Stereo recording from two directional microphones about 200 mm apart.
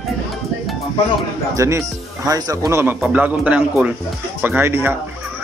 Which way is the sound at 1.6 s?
15° right (ahead or behind).